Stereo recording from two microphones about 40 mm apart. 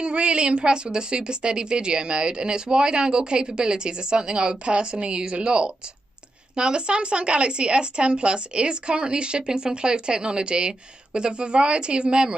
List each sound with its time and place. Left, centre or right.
0.0 s a woman's voice: right